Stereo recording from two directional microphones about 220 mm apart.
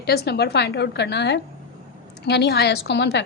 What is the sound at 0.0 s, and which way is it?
A woman's voice, 45° left (ahead or behind).